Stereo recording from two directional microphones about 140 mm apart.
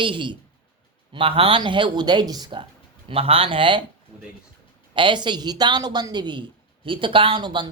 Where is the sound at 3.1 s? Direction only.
40° right (ahead or behind).